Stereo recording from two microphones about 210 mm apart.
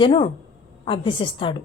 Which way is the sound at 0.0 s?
25° left (ahead or behind).